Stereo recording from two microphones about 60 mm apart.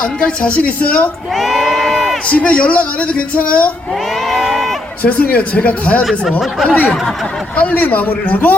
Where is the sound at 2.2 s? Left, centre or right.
Left.